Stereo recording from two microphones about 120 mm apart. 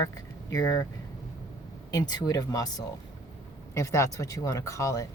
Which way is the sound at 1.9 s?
35° left (ahead or behind).